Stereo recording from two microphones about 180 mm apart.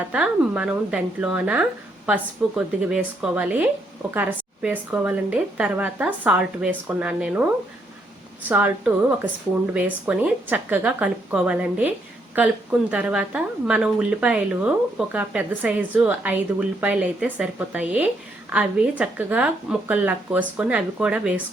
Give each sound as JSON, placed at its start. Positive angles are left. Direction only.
{"t": 0.1, "sound": "a woman's voice", "side_deg": -5}
{"t": 8.4, "sound": "a woman's voice", "side_deg": -10}